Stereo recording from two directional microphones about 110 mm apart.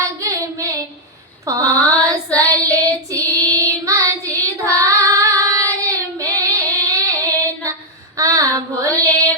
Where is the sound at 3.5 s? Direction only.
30° right (ahead or behind).